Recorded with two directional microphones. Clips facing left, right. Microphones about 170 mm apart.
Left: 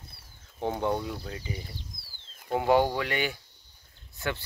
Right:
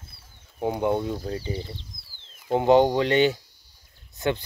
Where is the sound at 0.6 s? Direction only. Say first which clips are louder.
Right 5 dB; 15° right (ahead or behind).